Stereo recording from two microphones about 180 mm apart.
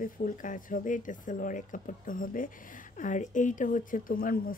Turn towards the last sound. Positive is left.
turn(degrees=50)  # may be behind; listen again after turning